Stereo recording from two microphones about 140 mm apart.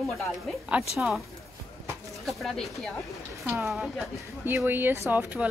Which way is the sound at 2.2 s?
Centre (ahead or behind).